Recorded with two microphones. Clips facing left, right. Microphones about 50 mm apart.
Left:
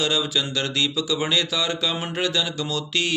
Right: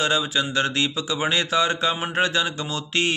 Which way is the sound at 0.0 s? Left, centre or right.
Right.